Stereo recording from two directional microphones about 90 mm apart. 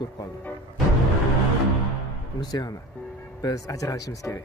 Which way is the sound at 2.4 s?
45° left (ahead or behind).